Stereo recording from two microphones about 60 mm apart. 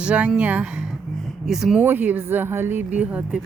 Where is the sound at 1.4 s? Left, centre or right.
Centre.